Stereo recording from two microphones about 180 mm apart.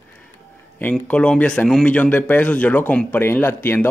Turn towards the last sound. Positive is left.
turn(degrees=10)  # may be behind; listen again after turning